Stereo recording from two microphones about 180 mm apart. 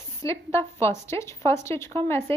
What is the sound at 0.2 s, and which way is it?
Speech, 15° left (ahead or behind).